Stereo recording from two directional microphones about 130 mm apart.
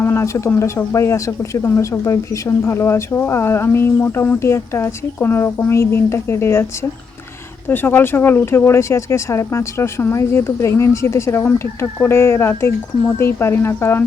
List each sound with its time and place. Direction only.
0.0 s speech: 20° left (ahead or behind)
7.7 s speech: 15° left (ahead or behind)